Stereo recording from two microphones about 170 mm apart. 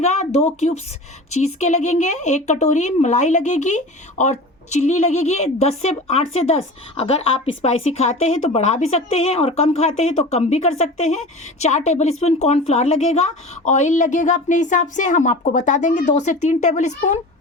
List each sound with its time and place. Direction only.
0.0 s a woman's voice: 40° left (ahead or behind)